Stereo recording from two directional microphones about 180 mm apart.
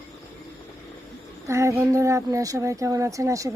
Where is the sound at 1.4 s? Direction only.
15° right (ahead or behind).